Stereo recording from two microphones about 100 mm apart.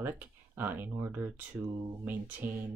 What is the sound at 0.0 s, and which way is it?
Speech, 20° right (ahead or behind).